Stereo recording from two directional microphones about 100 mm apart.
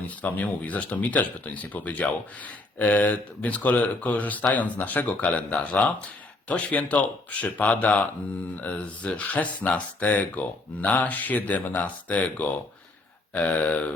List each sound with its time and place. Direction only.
0.1 s speech: 15° left (ahead or behind)